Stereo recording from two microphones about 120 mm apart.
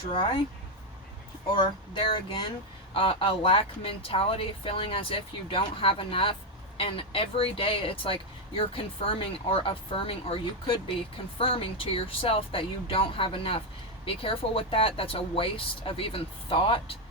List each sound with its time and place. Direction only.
2.0 s speech: 45° left (ahead or behind)